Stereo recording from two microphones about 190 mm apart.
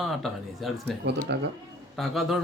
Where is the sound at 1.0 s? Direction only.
65° right (ahead or behind).